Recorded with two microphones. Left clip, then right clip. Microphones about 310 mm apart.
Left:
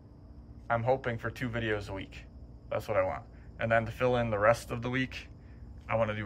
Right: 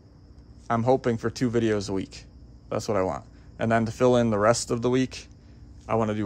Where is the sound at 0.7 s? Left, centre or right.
Centre.